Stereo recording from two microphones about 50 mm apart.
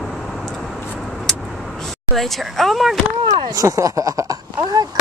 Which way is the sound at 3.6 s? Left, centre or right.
Right.